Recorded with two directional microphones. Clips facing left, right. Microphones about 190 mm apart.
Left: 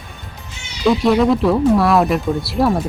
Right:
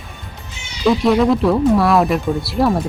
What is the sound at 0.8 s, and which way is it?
Speech, centre (ahead or behind).